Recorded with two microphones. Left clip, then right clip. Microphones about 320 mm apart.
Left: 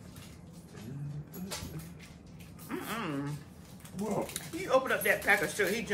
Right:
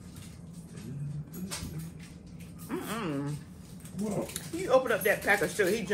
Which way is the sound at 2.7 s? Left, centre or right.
Centre.